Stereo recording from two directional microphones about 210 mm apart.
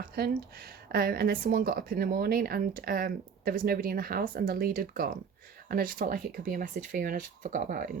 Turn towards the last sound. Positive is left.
turn(degrees=-40)  # may be behind; listen again after turning